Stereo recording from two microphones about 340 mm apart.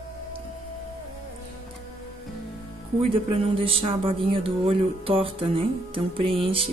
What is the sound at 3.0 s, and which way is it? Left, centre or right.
Speech, centre.